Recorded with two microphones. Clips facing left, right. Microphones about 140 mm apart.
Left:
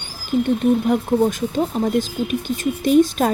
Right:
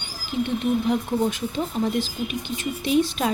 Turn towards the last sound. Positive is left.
turn(degrees=45)  # may be behind; listen again after turning